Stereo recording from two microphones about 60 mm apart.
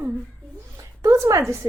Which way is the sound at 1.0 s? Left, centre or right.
Right.